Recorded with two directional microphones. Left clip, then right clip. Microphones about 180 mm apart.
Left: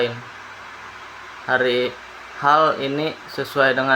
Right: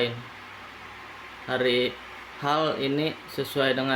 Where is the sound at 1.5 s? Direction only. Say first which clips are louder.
Left 6 dB; 15° right (ahead or behind).